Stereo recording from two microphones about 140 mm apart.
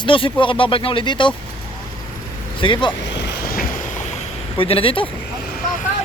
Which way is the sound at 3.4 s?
90° left.